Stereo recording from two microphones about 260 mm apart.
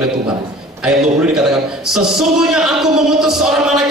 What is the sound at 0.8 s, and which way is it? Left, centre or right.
A man's voice, centre.